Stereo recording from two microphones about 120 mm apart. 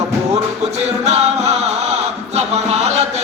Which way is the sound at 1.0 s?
65° right (ahead or behind).